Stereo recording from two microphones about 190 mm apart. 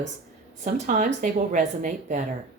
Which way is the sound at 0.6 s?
40° right (ahead or behind).